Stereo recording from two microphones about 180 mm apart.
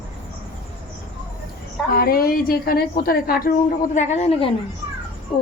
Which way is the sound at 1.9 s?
55° left (ahead or behind).